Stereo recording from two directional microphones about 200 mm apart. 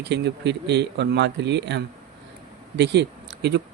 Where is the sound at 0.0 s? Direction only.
60° right (ahead or behind).